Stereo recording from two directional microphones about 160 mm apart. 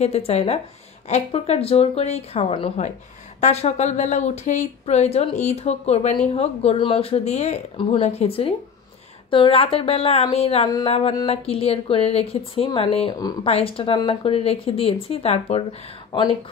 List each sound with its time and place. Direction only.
0.0 s speech: 40° left (ahead or behind)